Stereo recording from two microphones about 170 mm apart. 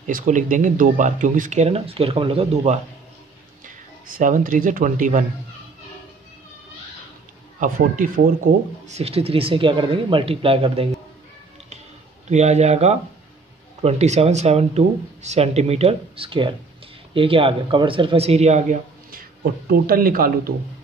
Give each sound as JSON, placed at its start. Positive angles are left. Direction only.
{"t": 0.0, "sound": "speech", "side_deg": -50}
{"t": 3.6, "sound": "speech", "side_deg": -50}
{"t": 7.6, "sound": "speech", "side_deg": -50}
{"t": 8.8, "sound": "speech", "side_deg": -40}
{"t": 12.3, "sound": "speech", "side_deg": -40}
{"t": 19.7, "sound": "speech", "side_deg": -55}